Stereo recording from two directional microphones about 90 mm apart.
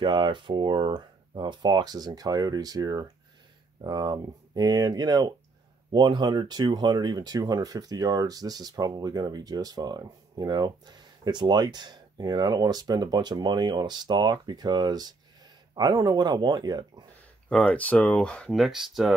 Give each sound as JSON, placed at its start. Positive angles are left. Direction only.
{"t": 0.0, "sound": "speech", "side_deg": -65}
{"t": 5.9, "sound": "speech", "side_deg": -60}
{"t": 17.6, "sound": "speech", "side_deg": 15}
{"t": 18.5, "sound": "speech", "side_deg": 0}